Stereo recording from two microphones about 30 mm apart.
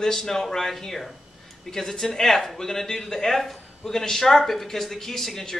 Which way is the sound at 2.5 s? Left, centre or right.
Centre.